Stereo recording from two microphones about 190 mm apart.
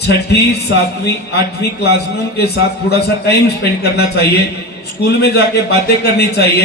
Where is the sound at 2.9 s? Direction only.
60° left (ahead or behind).